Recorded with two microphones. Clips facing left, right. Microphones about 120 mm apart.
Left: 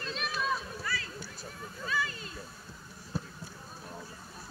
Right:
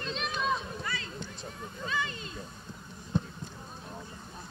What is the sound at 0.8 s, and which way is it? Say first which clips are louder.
Run: even; 20° right (ahead or behind).